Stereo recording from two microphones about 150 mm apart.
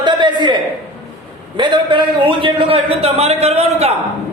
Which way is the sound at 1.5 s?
30° right (ahead or behind).